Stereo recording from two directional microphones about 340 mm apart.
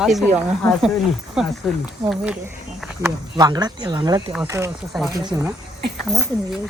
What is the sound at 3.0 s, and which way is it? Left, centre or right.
Speech, centre.